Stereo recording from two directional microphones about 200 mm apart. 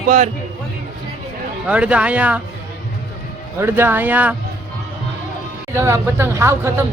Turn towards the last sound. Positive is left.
turn(degrees=-15)  # may be behind; listen again after turning